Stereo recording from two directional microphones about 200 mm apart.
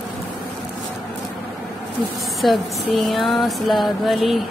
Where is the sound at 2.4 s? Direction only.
Centre (ahead or behind).